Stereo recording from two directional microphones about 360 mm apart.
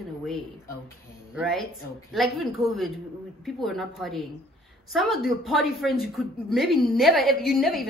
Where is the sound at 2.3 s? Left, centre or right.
Centre.